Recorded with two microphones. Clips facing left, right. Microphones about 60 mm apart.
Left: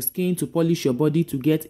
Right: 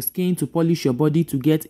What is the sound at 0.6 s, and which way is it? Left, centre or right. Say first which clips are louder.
Speech: right 1 dB; right.